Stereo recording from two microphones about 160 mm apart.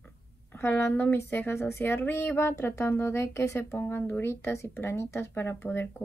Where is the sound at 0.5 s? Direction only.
15° left (ahead or behind).